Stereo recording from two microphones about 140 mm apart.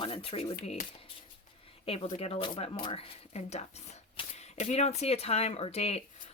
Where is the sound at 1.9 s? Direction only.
45° left (ahead or behind).